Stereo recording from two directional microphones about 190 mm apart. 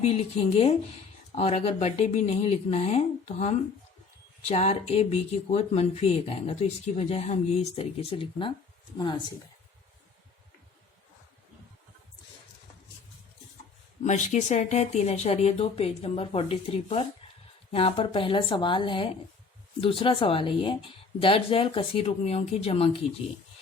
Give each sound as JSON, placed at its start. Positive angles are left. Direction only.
{"t": 0.0, "sound": "speech", "side_deg": 35}
{"t": 14.0, "sound": "speech", "side_deg": 40}